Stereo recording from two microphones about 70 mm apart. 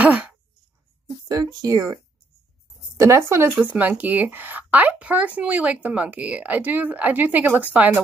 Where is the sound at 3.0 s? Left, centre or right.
Right.